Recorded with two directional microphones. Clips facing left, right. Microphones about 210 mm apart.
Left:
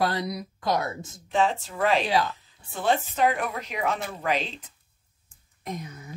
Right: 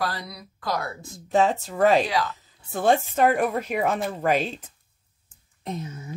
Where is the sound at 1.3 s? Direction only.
40° right (ahead or behind).